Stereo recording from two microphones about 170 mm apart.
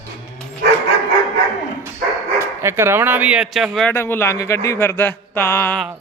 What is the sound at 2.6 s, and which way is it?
Speech, 15° right (ahead or behind).